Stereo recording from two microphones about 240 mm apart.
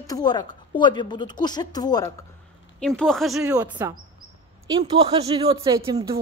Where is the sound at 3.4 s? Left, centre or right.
Centre.